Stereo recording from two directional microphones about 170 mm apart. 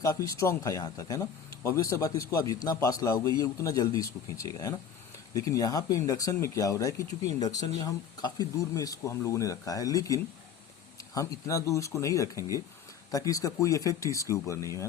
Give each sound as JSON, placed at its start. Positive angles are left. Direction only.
{"t": 0.0, "sound": "speech", "side_deg": 20}